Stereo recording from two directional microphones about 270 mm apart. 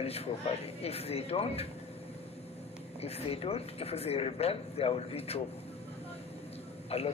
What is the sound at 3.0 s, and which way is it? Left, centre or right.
Speech, left.